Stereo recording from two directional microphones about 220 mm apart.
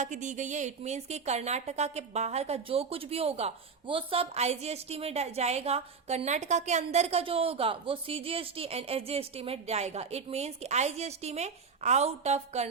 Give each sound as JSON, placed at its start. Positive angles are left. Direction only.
{"t": 0.0, "sound": "speech", "side_deg": -35}